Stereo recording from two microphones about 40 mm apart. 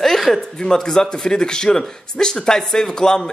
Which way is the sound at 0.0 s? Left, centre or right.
Centre.